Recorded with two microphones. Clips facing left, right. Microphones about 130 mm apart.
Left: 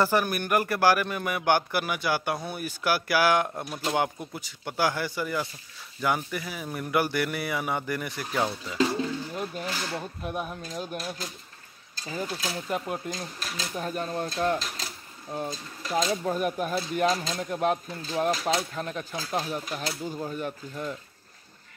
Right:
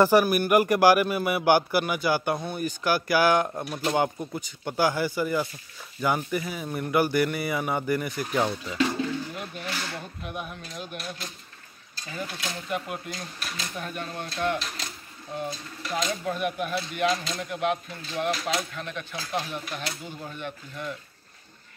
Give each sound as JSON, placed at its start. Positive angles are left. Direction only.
{"t": 0.0, "sound": "a man's voice", "side_deg": -10}
{"t": 9.3, "sound": "speech", "side_deg": 30}